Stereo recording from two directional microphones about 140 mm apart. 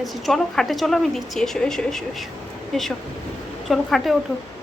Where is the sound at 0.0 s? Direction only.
Centre (ahead or behind).